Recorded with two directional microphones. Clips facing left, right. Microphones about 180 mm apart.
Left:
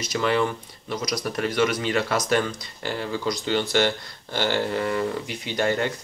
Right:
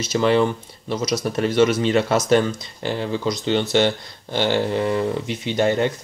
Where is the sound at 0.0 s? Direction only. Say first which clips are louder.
Right 5 dB; 25° right (ahead or behind).